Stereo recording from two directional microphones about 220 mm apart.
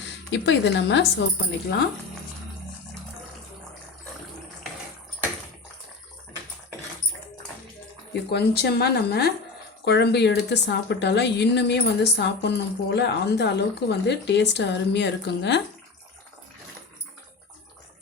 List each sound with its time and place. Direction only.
0.3 s a woman's voice: 55° left (ahead or behind)
8.1 s a woman's voice: 50° left (ahead or behind)